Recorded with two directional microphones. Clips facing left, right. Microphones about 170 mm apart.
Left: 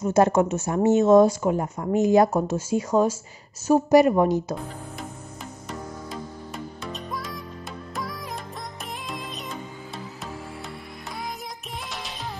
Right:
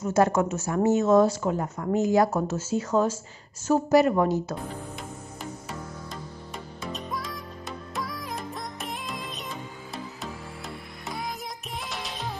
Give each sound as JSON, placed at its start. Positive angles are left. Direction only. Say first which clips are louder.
{"t": 0.0, "sound": "speech", "louder": "left 3 dB", "side_deg": 20}
{"t": 5.4, "sound": "music", "louder": "left 1 dB", "side_deg": 0}
{"t": 11.1, "sound": "music", "louder": "right 1 dB", "side_deg": 0}